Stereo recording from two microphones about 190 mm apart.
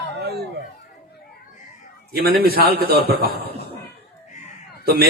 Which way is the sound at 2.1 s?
55° right (ahead or behind).